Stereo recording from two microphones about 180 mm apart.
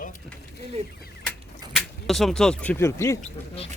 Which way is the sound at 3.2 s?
35° left (ahead or behind).